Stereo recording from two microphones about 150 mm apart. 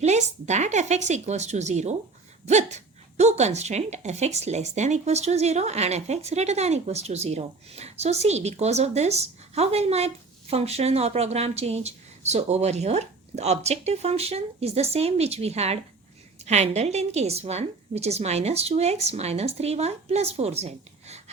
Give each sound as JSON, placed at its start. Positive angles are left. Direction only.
{"t": 0.0, "sound": "speech", "side_deg": -50}